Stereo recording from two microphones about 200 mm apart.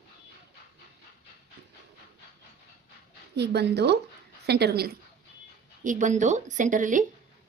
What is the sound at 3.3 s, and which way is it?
Speech, 55° right (ahead or behind).